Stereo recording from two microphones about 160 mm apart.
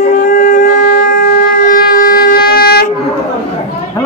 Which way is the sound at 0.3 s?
60° left (ahead or behind).